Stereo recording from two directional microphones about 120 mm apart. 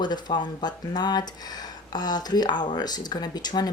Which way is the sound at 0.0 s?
35° left (ahead or behind).